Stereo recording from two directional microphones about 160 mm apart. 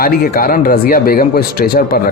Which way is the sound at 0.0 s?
65° left (ahead or behind).